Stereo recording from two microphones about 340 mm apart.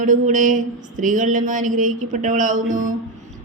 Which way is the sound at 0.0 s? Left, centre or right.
Right.